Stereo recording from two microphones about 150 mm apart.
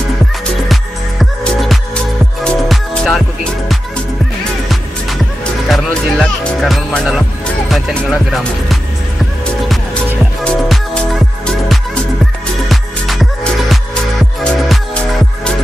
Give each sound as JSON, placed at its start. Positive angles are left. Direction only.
{"t": 1.4, "sound": "music", "side_deg": 0}
{"t": 5.7, "sound": "music", "side_deg": 0}
{"t": 10.4, "sound": "music", "side_deg": 5}